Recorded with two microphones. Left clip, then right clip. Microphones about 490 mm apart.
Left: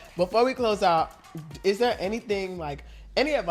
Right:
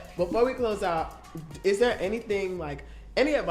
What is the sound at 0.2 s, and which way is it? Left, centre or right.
Speech, left.